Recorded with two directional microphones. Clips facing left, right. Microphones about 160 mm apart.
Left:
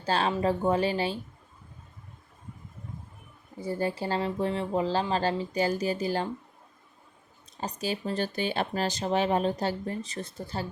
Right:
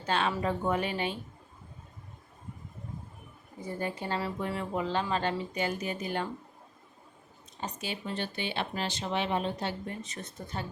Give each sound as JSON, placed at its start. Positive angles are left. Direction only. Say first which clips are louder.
{"t": 0.0, "sound": "speech", "louder": "left 3 dB", "side_deg": 35}
{"t": 3.6, "sound": "speech", "louder": "left 5 dB", "side_deg": 30}
{"t": 7.6, "sound": "speech", "louder": "left 5 dB", "side_deg": 40}